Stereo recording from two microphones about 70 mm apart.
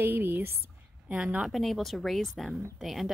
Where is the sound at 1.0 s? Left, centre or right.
Centre.